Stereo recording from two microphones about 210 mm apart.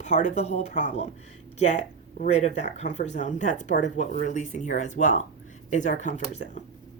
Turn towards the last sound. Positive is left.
turn(degrees=35)  # may be behind; listen again after turning